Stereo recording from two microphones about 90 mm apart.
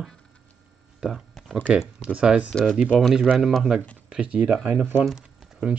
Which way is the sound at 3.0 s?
5° right (ahead or behind).